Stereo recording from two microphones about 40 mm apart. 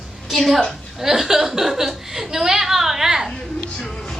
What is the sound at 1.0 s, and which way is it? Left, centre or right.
A woman's voice, centre.